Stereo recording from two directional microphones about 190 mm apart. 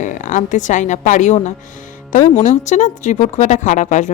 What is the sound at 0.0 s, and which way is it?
Speech, 40° left (ahead or behind).